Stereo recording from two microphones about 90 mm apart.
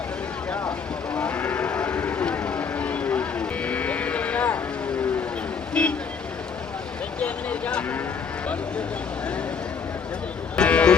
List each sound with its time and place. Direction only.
1.1 s cattle: 15° left (ahead or behind)
5.8 s vehicle: 10° left (ahead or behind)
7.2 s vehicle: 15° left (ahead or behind)
10.6 s a sound: 15° left (ahead or behind)